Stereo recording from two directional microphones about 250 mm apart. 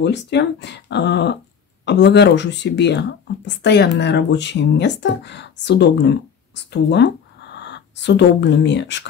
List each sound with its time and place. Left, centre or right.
0.0 s speech: left